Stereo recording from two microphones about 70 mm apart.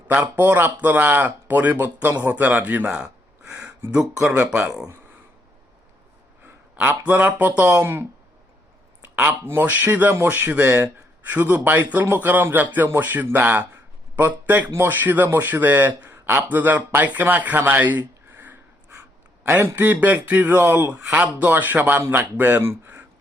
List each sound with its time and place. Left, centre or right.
0.1 s speech: right
4.4 s speech: right
6.4 s a sound: right
7.1 s speech: right
7.8 s speech: right
9.2 s speech: right
16.3 s speech: right
16.6 s speech: right
17.2 s a sound: right
19.5 s speech: right
20.9 s speech: right